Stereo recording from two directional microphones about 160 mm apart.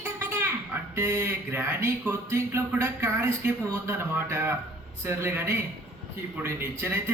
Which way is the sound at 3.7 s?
15° right (ahead or behind).